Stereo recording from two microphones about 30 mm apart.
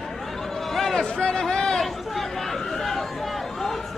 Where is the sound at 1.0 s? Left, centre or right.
Left.